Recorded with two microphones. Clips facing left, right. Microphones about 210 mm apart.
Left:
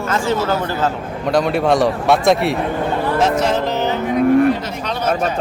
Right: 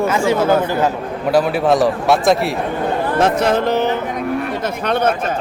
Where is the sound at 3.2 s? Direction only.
55° right (ahead or behind).